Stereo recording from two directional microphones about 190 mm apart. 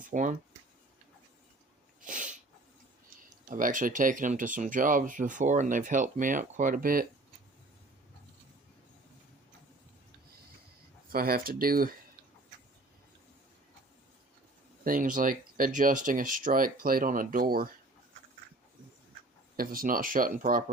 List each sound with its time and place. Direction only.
0.0 s speech: 45° right (ahead or behind)
2.0 s sneeze: 45° right (ahead or behind)
3.5 s speech: 45° right (ahead or behind)
11.1 s speech: 50° right (ahead or behind)
14.8 s speech: 45° right (ahead or behind)
19.5 s speech: 50° right (ahead or behind)